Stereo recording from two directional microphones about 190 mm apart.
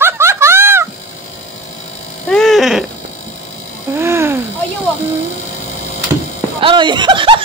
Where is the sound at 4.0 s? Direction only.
15° right (ahead or behind).